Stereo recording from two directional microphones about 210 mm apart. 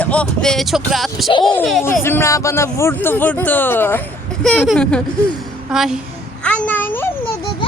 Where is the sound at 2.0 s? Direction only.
10° left (ahead or behind).